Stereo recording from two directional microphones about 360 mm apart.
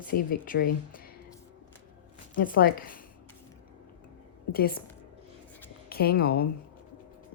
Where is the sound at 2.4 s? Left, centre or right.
Left.